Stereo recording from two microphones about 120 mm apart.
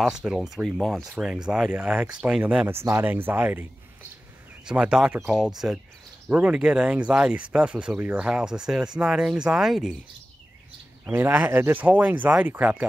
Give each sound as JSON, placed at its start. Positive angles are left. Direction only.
{"t": 0.0, "sound": "speech", "side_deg": -5}
{"t": 4.6, "sound": "speech", "side_deg": -5}
{"t": 11.1, "sound": "speech", "side_deg": -15}